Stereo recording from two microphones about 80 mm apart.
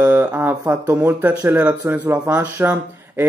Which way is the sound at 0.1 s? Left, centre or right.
Right.